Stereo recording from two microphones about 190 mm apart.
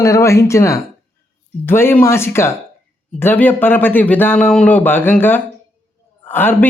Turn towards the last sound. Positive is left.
turn(degrees=10)  # may be behind; listen again after turning